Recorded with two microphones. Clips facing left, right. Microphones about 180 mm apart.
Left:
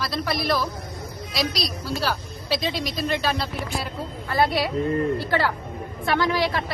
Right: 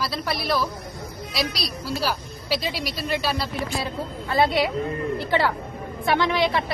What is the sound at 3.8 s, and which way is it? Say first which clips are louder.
Speech: right 2 dB; 20° right (ahead or behind).